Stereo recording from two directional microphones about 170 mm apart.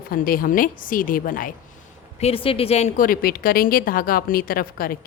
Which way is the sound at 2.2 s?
35° left (ahead or behind).